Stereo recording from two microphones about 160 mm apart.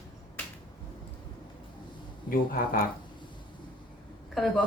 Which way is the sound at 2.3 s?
65° left (ahead or behind).